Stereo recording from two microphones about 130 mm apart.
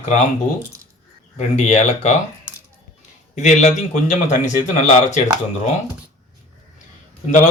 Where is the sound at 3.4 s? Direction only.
65° left (ahead or behind).